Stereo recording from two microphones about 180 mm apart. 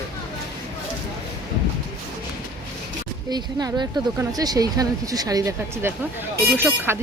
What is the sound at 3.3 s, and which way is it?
Speech, 20° right (ahead or behind).